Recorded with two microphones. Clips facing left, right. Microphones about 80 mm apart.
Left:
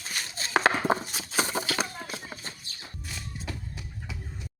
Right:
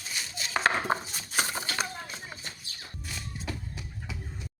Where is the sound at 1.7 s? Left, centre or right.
Left.